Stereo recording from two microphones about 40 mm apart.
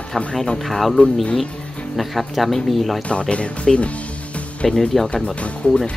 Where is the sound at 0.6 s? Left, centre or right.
Centre.